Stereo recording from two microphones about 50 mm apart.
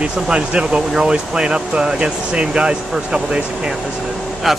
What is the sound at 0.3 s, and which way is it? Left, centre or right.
Speech, centre.